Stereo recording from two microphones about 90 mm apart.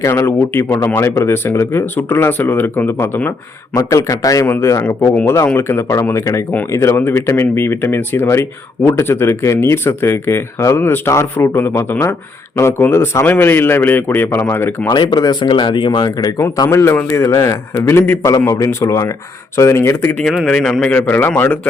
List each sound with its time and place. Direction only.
0.0 s speech: 30° left (ahead or behind)
3.8 s a man's voice: 35° left (ahead or behind)
14.8 s speech: 45° left (ahead or behind)
16.0 s speech: 45° left (ahead or behind)
16.6 s a man's voice: 30° left (ahead or behind)
20.1 s a man's voice: 5° left (ahead or behind)
21.1 s speech: 25° left (ahead or behind)